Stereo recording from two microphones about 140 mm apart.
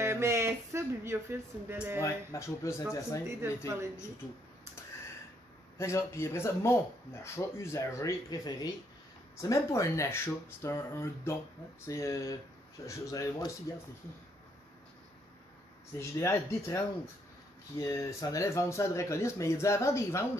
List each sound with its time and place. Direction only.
0.0 s speech: 20° right (ahead or behind)
2.0 s speech: 20° left (ahead or behind)
3.3 s speech: 20° right (ahead or behind)
5.8 s speech: 20° left (ahead or behind)
16.0 s speech: 20° left (ahead or behind)